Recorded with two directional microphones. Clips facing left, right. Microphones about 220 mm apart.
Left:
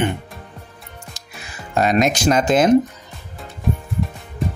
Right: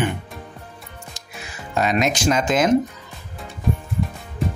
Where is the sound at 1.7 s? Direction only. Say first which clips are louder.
Left 3 dB; 45° left (ahead or behind).